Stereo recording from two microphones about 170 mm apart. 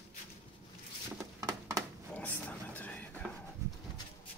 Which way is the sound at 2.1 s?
10° left (ahead or behind).